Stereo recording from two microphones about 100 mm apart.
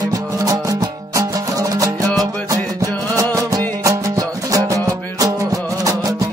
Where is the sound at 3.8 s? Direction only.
35° right (ahead or behind).